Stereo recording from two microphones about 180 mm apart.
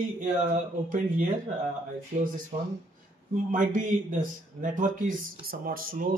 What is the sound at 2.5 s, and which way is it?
Speech, 45° right (ahead or behind).